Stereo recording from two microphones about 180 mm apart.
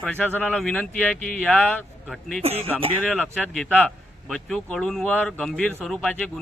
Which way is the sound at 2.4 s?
35° right (ahead or behind).